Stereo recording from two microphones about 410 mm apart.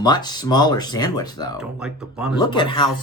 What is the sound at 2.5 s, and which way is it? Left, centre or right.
Speech, centre.